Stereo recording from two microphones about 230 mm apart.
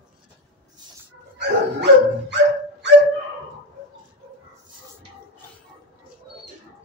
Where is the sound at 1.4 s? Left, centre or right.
Right.